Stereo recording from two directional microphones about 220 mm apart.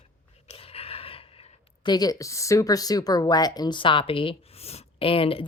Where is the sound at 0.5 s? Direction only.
25° left (ahead or behind).